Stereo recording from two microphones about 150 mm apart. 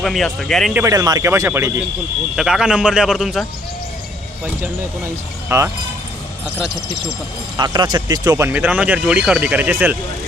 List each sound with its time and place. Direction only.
0.0 s a man's voice: centre (ahead or behind)
0.9 s speech: 25° right (ahead or behind)
2.3 s a man's voice: 5° right (ahead or behind)
5.5 s speech: 15° right (ahead or behind)
7.5 s speech: 30° right (ahead or behind)
8.4 s speech: 10° right (ahead or behind)